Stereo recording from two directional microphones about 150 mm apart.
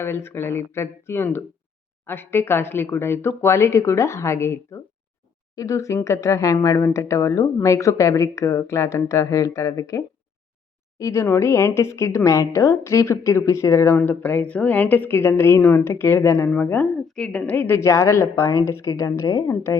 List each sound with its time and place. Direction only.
0.0 s a woman's voice: 15° left (ahead or behind)